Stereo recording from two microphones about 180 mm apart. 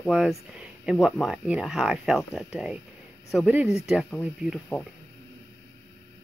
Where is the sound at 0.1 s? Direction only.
5° right (ahead or behind).